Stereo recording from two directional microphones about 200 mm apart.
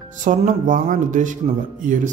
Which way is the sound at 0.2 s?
40° right (ahead or behind).